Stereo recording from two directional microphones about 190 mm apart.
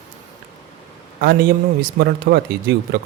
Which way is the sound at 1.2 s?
50° right (ahead or behind).